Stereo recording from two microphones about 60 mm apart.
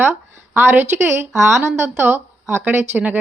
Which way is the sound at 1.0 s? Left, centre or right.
Right.